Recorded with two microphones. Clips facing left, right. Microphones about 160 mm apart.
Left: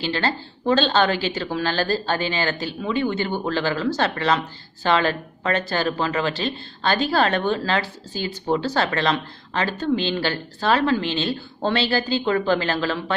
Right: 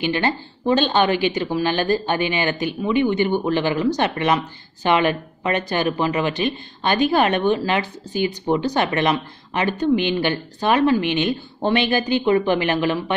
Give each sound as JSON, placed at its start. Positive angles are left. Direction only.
{"t": 0.0, "sound": "speech", "side_deg": -15}